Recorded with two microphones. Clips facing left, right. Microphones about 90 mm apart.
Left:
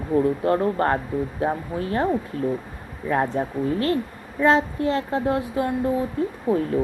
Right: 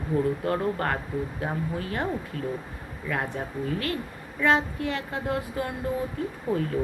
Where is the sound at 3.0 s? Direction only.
30° left (ahead or behind).